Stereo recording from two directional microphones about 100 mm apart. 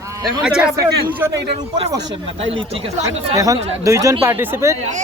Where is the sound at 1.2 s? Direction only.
20° right (ahead or behind).